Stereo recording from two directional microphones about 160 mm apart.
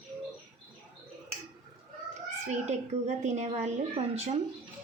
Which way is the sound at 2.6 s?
45° right (ahead or behind).